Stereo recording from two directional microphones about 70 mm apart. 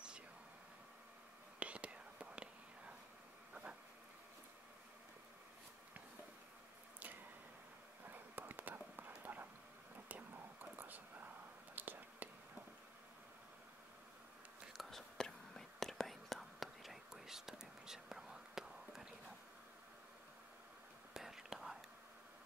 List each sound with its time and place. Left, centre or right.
1.6 s whispering: centre
8.1 s a sound: right
10.0 s whispering: right
14.7 s whispering: centre
21.1 s whispering: centre